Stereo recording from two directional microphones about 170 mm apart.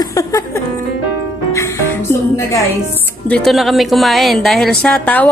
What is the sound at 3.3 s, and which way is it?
Speech, centre (ahead or behind).